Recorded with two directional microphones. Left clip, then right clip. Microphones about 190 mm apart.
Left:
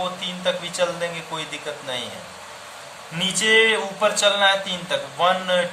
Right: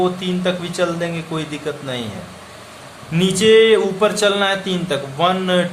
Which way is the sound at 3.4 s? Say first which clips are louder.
Right 6 dB; 20° right (ahead or behind).